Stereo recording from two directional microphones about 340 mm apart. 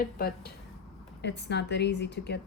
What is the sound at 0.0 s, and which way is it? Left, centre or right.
A woman's voice, left.